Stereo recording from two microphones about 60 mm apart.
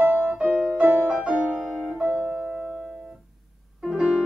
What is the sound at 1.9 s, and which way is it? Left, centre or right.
Piano, right.